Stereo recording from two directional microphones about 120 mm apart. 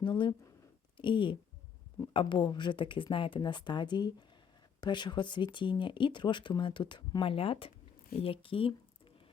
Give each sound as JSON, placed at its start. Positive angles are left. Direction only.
{"t": 0.0, "sound": "speech", "side_deg": 40}